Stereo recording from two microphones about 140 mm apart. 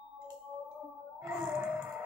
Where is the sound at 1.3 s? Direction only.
20° right (ahead or behind).